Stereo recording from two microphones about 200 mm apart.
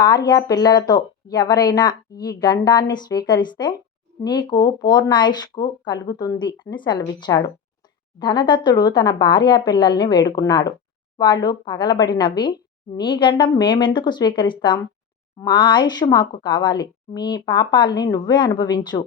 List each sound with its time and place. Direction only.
0.0 s speech: 20° left (ahead or behind)